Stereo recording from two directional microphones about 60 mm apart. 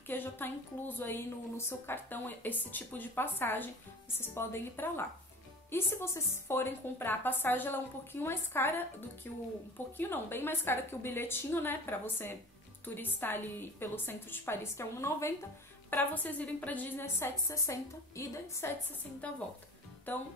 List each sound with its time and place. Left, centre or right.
0.0 s a woman's voice: left
15.9 s a woman's voice: left
17.2 s a woman's voice: left
19.2 s a woman's voice: left